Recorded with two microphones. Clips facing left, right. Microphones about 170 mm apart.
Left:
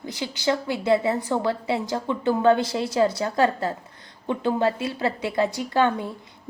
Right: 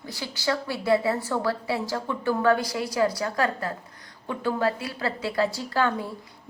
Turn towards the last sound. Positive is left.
turn(degrees=20)  # may be behind; listen again after turning